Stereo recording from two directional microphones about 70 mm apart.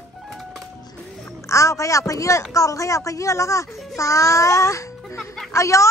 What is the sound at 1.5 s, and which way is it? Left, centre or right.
A woman's voice, left.